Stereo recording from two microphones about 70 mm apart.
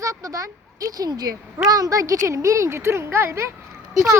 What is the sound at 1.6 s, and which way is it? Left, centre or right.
Speech, right.